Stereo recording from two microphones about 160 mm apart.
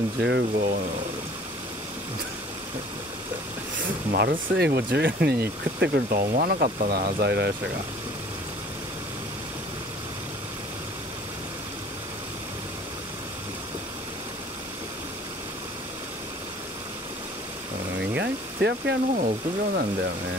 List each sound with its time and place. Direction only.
0.2 s speech: 75° right (ahead or behind)
4.1 s speech: 80° right
18.1 s speech: 90° right
19.2 s speech: 70° right (ahead or behind)